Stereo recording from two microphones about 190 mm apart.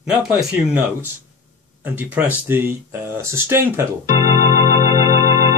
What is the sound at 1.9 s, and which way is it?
Speech, 10° right (ahead or behind).